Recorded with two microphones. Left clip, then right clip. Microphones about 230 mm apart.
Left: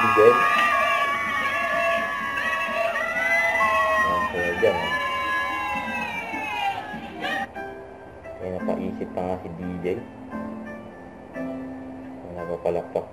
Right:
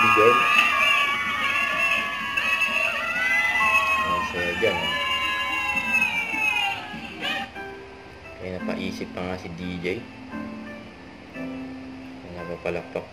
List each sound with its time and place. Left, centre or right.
0.0 s music: centre
8.6 s music: right